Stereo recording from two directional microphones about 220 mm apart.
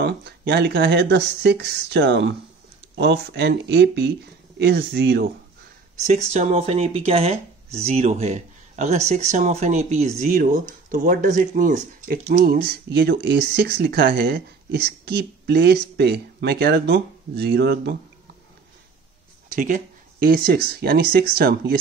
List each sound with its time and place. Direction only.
0.0 s speech: 50° right (ahead or behind)
6.0 s speech: 30° right (ahead or behind); by 17.9 s 45° right (ahead or behind)
19.5 s a sound: 35° right (ahead or behind)
20.8 s speech: 45° right (ahead or behind)